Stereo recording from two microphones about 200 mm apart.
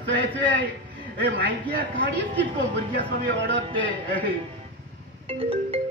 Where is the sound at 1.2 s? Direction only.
65° right (ahead or behind).